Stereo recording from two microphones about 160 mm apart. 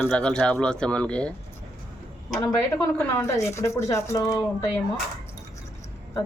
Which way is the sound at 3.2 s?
20° left (ahead or behind).